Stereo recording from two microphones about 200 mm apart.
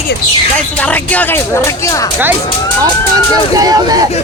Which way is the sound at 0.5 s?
5° left (ahead or behind).